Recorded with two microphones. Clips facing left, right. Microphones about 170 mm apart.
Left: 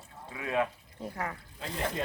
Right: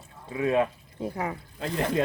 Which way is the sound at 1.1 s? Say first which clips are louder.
Right 4 dB; 15° right (ahead or behind).